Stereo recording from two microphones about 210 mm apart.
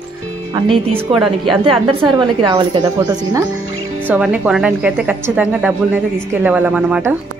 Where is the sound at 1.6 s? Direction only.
25° right (ahead or behind).